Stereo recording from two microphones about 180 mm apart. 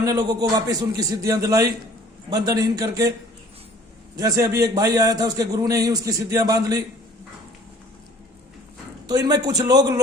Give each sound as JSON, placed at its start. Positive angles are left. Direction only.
{"t": 0.0, "sound": "a man's voice", "side_deg": -20}
{"t": 4.2, "sound": "a man's voice", "side_deg": -20}
{"t": 9.0, "sound": "a man's voice", "side_deg": -20}